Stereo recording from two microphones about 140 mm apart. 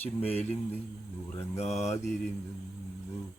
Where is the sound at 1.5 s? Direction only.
50° left (ahead or behind).